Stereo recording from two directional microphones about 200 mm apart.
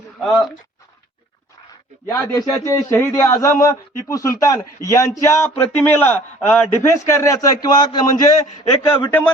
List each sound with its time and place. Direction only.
0.2 s speech: centre (ahead or behind)
2.0 s a man's voice: 15° left (ahead or behind)